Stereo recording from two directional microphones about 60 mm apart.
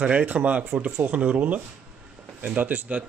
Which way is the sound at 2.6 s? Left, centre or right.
Right.